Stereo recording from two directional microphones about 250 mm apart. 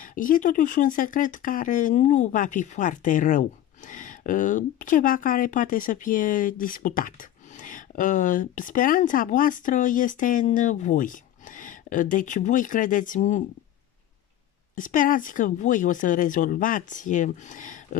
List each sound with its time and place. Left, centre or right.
0.0 s speech: left
14.8 s speech: left